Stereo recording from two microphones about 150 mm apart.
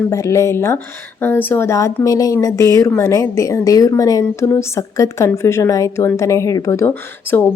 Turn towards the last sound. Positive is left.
turn(degrees=15)  # may be behind; listen again after turning